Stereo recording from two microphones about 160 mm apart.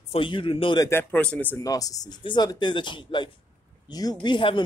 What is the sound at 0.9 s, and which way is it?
Speech, 10° left (ahead or behind).